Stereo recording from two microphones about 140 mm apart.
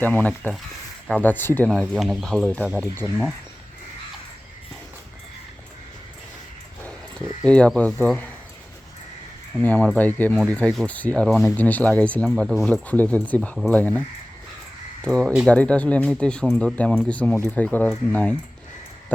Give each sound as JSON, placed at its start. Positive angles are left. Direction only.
{"t": 0.0, "sound": "speech", "side_deg": 10}
{"t": 1.9, "sound": "speech", "side_deg": 0}
{"t": 2.8, "sound": "speech", "side_deg": 15}
{"t": 7.4, "sound": "speech", "side_deg": 10}
{"t": 9.6, "sound": "speech", "side_deg": 10}
{"t": 15.0, "sound": "speech", "side_deg": 5}